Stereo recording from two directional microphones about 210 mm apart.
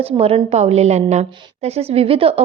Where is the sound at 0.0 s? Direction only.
30° right (ahead or behind).